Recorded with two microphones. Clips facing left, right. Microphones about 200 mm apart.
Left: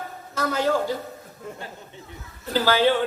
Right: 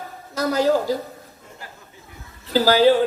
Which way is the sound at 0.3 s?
40° right (ahead or behind).